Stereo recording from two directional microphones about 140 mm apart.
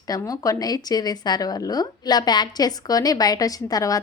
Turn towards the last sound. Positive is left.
turn(degrees=25)  # may be behind; listen again after turning